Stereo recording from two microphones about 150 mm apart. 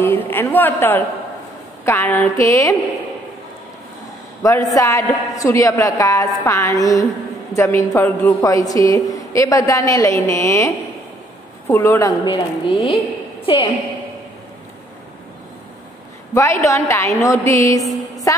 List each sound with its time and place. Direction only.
0.0 s a man's voice: 15° left (ahead or behind)
4.4 s a woman's voice: 20° left (ahead or behind)
12.3 s a woman's voice: 35° left (ahead or behind)
16.3 s a woman's voice: 20° left (ahead or behind)